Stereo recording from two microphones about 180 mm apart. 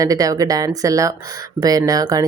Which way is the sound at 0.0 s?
20° right (ahead or behind).